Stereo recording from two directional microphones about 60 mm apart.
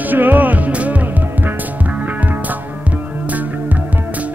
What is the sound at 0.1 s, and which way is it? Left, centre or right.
Music, right.